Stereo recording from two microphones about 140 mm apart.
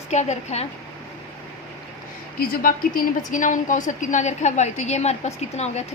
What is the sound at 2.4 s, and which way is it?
A woman's voice, 85° left.